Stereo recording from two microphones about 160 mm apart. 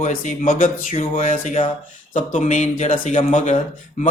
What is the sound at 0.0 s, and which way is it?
A man's voice, 55° left (ahead or behind).